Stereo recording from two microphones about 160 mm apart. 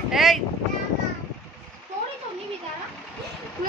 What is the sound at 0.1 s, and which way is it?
Wind noise, centre (ahead or behind).